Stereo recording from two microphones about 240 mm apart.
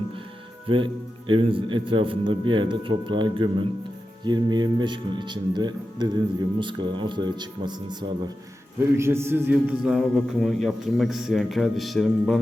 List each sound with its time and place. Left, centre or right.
0.7 s a man's voice: right; by 12.4 s centre